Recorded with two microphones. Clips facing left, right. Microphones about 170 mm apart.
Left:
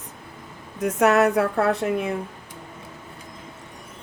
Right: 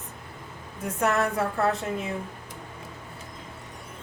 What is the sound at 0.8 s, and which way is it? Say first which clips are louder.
Speech: left 7 dB; 75° left (ahead or behind).